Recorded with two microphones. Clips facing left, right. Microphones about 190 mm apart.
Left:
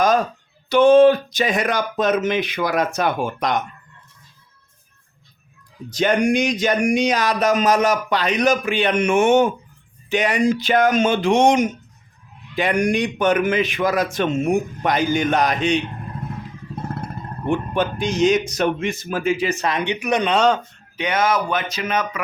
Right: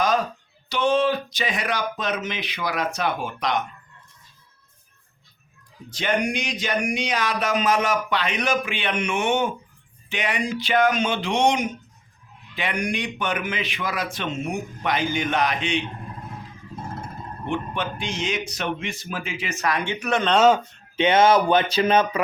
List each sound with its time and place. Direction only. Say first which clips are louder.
0.7 s a man's voice: left 10 dB; 50° left (ahead or behind)
5.9 s a man's voice: left 7 dB; 40° left (ahead or behind)
17.4 s speech: left 7 dB; 45° left (ahead or behind); by 20.3 s 15° left (ahead or behind)
20.3 s speech: right 2 dB; 5° right (ahead or behind)
20.9 s speech: right 3 dB; 25° right (ahead or behind)